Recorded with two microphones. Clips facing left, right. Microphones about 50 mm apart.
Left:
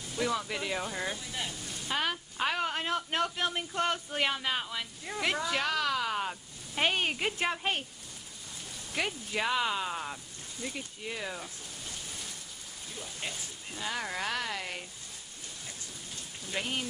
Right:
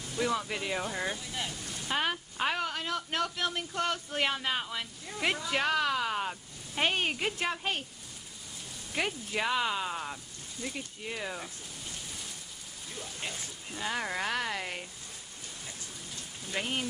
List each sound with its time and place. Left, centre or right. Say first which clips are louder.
0.2 s speech: right 1 dB; centre
2.6 s speech: left 2 dB; left
4.2 s speech: right 1 dB; centre
5.5 s a woman's voice: right 2 dB; right
5.9 s speech: even; centre
8.9 s speech: right 1 dB; centre
13.7 s speech: right 2 dB; centre
16.5 s speech: right 1 dB; centre